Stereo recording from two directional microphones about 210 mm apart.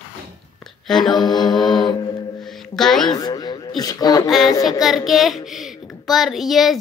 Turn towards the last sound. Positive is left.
turn(degrees=0)  # may be behind; listen again after turning